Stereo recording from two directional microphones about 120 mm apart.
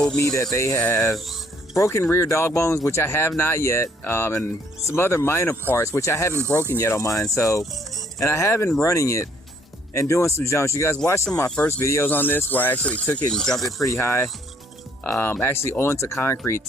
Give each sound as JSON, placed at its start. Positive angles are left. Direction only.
{"t": 0.2, "sound": "speech", "side_deg": 25}
{"t": 1.1, "sound": "speech", "side_deg": 0}
{"t": 1.7, "sound": "speech", "side_deg": 25}
{"t": 11.4, "sound": "speech", "side_deg": 10}
{"t": 13.5, "sound": "speech", "side_deg": 0}
{"t": 13.8, "sound": "speech", "side_deg": 25}